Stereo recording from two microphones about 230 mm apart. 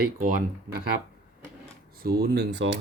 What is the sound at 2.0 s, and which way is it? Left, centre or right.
Speech, right.